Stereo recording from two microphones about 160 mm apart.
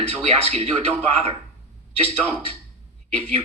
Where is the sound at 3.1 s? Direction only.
40° right (ahead or behind).